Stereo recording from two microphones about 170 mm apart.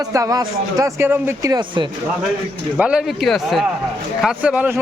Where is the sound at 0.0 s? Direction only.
20° right (ahead or behind).